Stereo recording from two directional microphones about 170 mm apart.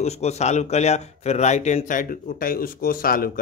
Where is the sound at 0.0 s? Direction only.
40° left (ahead or behind).